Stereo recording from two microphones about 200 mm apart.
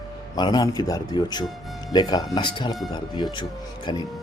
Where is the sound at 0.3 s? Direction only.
20° left (ahead or behind).